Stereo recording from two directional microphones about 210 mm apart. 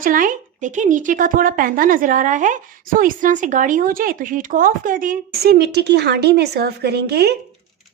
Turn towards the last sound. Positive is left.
turn(degrees=-50)  # may be behind; listen again after turning